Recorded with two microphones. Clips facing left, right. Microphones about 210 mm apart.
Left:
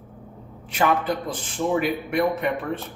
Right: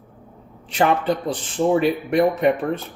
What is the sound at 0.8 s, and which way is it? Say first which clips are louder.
A man's voice: right 3 dB; 30° right (ahead or behind).